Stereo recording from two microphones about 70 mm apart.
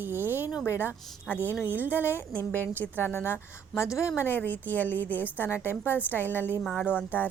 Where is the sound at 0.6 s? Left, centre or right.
Left.